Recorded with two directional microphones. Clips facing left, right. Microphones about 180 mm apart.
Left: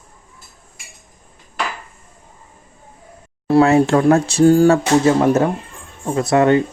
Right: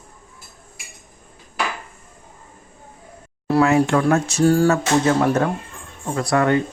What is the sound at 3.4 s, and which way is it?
Speech, 30° left (ahead or behind).